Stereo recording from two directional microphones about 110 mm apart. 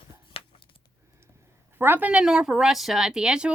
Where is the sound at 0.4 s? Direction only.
60° left (ahead or behind).